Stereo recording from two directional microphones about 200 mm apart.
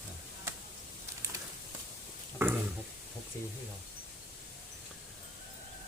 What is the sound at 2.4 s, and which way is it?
Speech, 10° right (ahead or behind).